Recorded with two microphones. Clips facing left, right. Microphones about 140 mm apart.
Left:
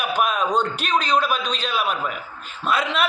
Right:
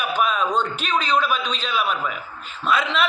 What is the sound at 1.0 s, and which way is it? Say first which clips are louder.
Speech: even; 35° left (ahead or behind).